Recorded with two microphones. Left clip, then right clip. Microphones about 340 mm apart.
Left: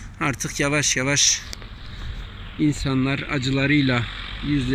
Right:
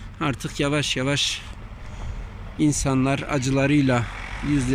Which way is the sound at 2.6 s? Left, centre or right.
Centre.